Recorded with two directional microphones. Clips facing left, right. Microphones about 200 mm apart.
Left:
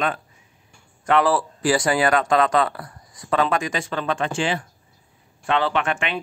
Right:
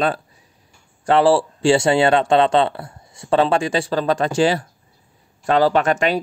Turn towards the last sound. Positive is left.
turn(degrees=-40)  # may be behind; listen again after turning